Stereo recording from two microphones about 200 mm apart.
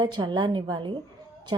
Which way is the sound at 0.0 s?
20° right (ahead or behind).